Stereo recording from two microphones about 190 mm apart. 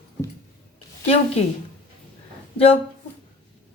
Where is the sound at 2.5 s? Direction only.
30° left (ahead or behind).